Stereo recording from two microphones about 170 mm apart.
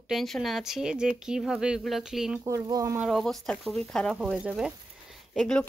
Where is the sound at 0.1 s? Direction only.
Centre (ahead or behind).